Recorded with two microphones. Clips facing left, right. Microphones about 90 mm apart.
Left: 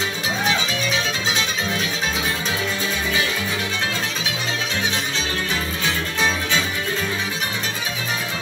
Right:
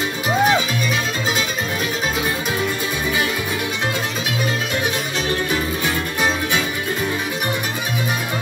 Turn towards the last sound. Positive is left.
turn(degrees=-15)  # may be behind; listen again after turning